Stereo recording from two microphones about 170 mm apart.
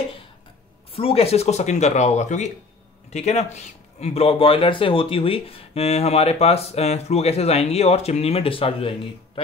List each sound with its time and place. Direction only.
0.9 s speech: 35° left (ahead or behind)